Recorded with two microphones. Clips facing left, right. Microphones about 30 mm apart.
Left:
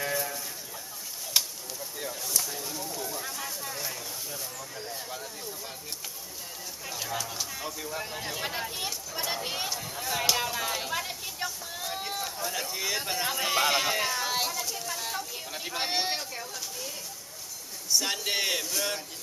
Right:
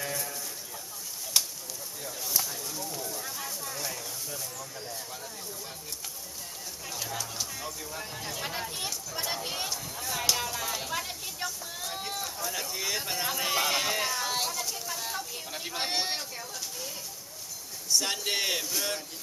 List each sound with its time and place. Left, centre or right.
0.0 s a sound: centre
6.8 s speech: centre
17.9 s speech: centre